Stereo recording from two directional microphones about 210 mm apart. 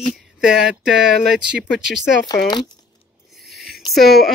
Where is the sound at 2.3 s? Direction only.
20° left (ahead or behind).